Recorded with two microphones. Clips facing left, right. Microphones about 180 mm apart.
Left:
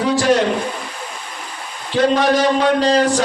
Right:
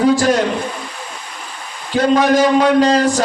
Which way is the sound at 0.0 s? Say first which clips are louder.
Right 2 dB; 45° right (ahead or behind).